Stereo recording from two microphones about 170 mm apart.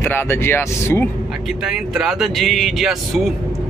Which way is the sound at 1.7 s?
5° right (ahead or behind).